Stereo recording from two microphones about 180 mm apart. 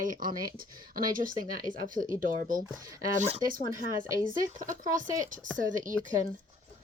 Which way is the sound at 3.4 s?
25° left (ahead or behind).